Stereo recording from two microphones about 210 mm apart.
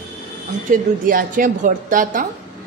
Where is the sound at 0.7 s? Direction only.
40° right (ahead or behind).